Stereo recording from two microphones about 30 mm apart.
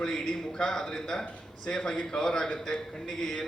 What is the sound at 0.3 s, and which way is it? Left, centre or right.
A man's voice, centre.